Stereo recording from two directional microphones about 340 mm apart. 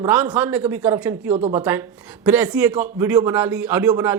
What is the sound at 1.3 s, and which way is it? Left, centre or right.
Speech, centre.